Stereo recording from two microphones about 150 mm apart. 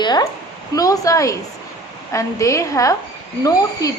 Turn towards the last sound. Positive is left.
turn(degrees=25)  # may be behind; listen again after turning